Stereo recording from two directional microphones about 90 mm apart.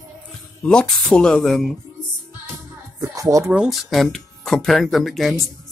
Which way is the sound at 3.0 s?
40° right (ahead or behind).